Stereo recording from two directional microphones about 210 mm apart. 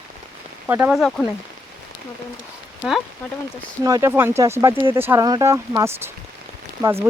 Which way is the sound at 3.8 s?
15° right (ahead or behind).